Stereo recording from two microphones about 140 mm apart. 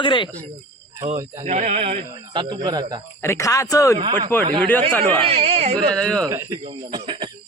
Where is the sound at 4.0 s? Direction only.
30° right (ahead or behind).